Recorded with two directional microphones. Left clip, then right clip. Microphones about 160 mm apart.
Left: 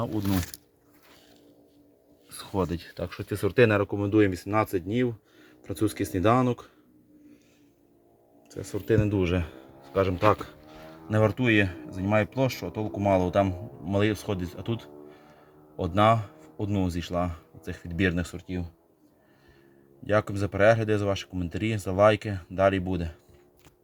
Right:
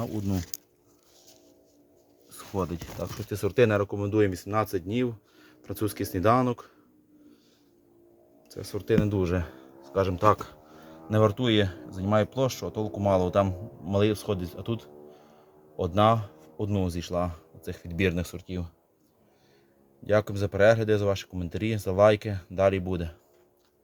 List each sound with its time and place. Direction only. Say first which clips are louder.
3.0 s speech: left 1 dB; 10° left (ahead or behind)
8.4 s speech: left 1 dB; 10° left (ahead or behind)
10.2 s speech: even; 10° left (ahead or behind)
16.0 s speech: left 1 dB; centre (ahead or behind)
20.1 s speech: right 1 dB; centre (ahead or behind)